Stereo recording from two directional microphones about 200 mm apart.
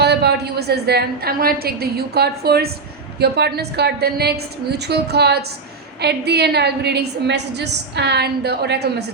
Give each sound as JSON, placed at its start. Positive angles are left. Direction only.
{"t": 0.0, "sound": "a woman's voice", "side_deg": -55}